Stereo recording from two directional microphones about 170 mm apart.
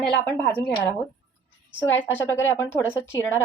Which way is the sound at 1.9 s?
15° left (ahead or behind).